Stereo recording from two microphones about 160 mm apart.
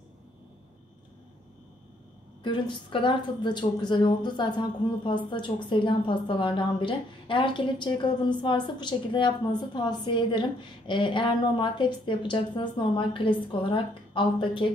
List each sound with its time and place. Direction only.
2.4 s a woman's voice: 30° left (ahead or behind)